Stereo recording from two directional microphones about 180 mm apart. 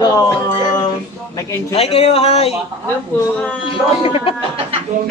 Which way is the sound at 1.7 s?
35° left (ahead or behind).